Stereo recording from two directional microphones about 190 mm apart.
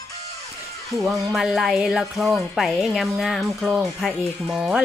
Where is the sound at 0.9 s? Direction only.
Centre (ahead or behind).